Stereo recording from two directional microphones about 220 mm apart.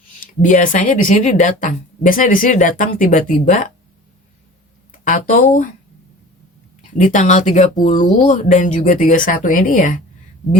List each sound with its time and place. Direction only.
0.2 s speech: 35° left (ahead or behind)
5.0 s speech: 35° left (ahead or behind)
6.9 s speech: 35° left (ahead or behind)